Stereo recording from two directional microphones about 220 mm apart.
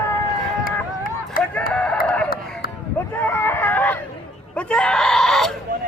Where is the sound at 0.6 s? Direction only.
40° left (ahead or behind).